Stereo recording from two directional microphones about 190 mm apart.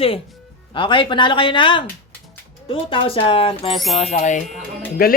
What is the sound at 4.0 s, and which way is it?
Speech, 35° left (ahead or behind).